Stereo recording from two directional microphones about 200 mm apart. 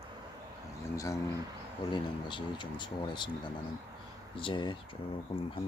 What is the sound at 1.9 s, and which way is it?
Speech, 25° left (ahead or behind).